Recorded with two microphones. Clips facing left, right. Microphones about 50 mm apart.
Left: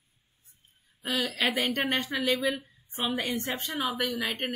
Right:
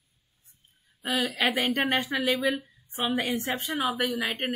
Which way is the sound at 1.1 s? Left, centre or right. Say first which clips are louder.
Right 2 dB; centre.